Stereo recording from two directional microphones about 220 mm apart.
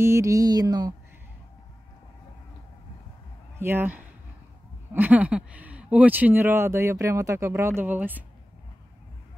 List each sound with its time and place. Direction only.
0.0 s speech: 15° right (ahead or behind)
3.5 s speech: 10° right (ahead or behind)